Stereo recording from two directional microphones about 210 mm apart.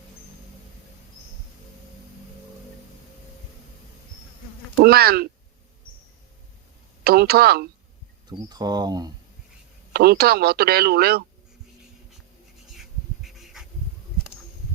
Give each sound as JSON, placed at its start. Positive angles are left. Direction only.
{"t": 4.8, "sound": "speech", "side_deg": -45}
{"t": 7.0, "sound": "speech", "side_deg": -45}
{"t": 8.3, "sound": "speech", "side_deg": -20}
{"t": 9.9, "sound": "speech", "side_deg": -50}
{"t": 12.6, "sound": "a sound", "side_deg": 0}